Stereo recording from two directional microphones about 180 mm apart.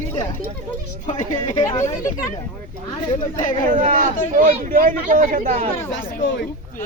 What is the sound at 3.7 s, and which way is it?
Speech, 45° right (ahead or behind).